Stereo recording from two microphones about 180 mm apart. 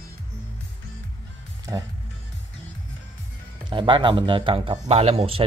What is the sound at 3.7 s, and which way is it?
A man's voice, 25° right (ahead or behind).